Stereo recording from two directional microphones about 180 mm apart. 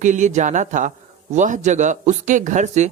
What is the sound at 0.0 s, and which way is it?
A man's voice, 45° right (ahead or behind).